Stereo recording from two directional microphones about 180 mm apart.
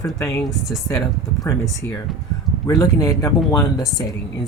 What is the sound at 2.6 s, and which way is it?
Speech, 20° left (ahead or behind).